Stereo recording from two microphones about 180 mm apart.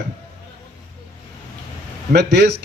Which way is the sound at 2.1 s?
65° right (ahead or behind).